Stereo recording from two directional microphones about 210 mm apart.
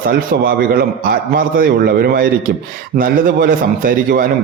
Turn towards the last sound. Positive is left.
turn(degrees=-45)  # may be behind; listen again after turning